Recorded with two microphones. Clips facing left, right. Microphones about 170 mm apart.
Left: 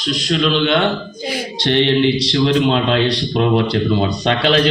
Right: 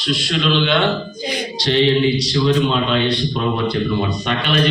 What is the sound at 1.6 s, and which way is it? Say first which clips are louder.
Music: left 1 dB; 60° left (ahead or behind).